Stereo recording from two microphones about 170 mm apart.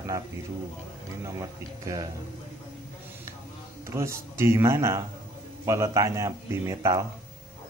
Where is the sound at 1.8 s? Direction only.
20° right (ahead or behind).